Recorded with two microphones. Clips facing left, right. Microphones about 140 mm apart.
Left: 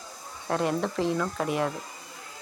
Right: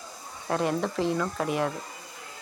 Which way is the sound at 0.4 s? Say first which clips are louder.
Even; centre (ahead or behind).